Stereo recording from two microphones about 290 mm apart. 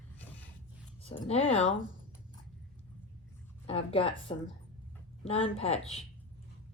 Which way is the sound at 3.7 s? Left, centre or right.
Centre.